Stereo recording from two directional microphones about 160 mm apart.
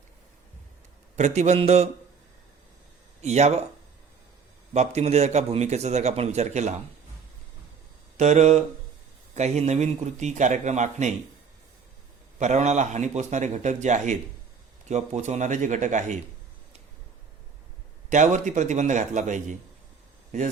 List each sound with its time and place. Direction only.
1.1 s a man's voice: 45° right (ahead or behind)
3.2 s speech: 45° right (ahead or behind)
4.7 s a man's voice: 45° right (ahead or behind)
8.1 s a man's voice: 45° right (ahead or behind)
12.4 s a man's voice: 45° right (ahead or behind)
18.1 s a man's voice: 50° right (ahead or behind)